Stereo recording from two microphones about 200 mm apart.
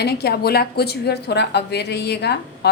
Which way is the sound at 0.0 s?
55° left (ahead or behind).